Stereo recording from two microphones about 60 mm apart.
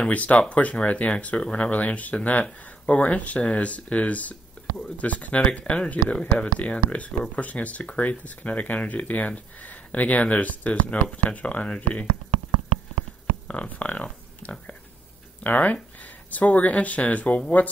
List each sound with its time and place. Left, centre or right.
0.1 s speech: left
13.5 s speech: left